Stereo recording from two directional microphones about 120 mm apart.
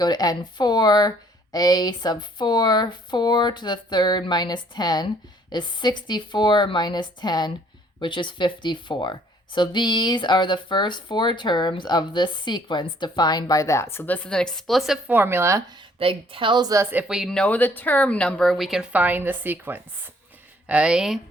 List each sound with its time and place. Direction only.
0.0 s speech: 35° left (ahead or behind); by 14.9 s centre (ahead or behind)
15.0 s speech: 15° right (ahead or behind)
16.0 s a woman's voice: 50° right (ahead or behind); by 16.8 s 35° right (ahead or behind)
16.8 s speech: 15° right (ahead or behind)
17.1 s speech: 5° right (ahead or behind)
17.3 s speech: 10° left (ahead or behind); by 21.2 s 5° right (ahead or behind)